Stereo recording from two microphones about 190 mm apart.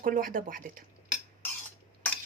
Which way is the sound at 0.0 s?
45° right (ahead or behind).